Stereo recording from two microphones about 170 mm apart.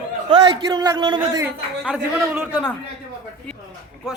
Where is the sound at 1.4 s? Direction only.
10° right (ahead or behind).